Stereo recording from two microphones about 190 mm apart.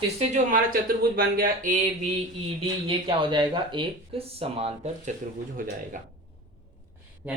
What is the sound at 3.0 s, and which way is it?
Speech, 25° right (ahead or behind).